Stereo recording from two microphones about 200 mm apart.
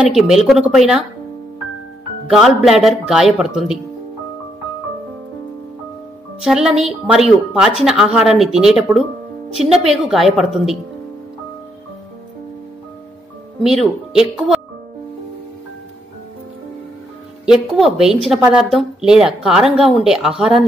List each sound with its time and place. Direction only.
0.0 s speech: centre (ahead or behind)
2.2 s speech: centre (ahead or behind)
6.4 s speech: 5° right (ahead or behind)
13.6 s speech: centre (ahead or behind)
17.5 s speech: centre (ahead or behind)